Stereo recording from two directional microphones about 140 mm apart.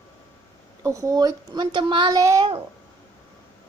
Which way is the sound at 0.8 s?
20° right (ahead or behind).